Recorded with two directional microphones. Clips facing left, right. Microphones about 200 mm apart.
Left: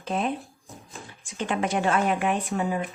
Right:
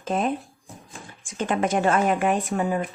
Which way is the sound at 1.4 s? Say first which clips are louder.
Right 3 dB; 45° right (ahead or behind).